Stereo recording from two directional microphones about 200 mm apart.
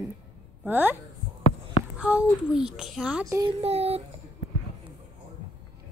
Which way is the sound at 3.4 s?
30° right (ahead or behind).